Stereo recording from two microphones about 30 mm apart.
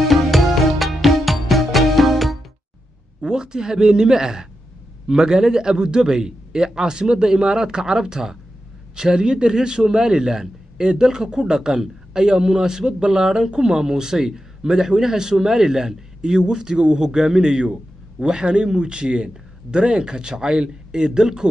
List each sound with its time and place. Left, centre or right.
0.0 s music: centre
3.2 s a man's voice: right